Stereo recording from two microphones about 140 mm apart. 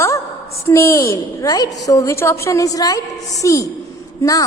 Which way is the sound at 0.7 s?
20° left (ahead or behind).